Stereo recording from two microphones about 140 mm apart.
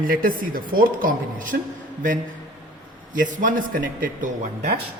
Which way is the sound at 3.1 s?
70° right (ahead or behind).